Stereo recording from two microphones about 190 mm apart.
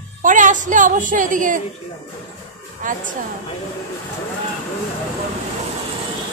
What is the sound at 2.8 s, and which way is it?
Speech, 45° right (ahead or behind).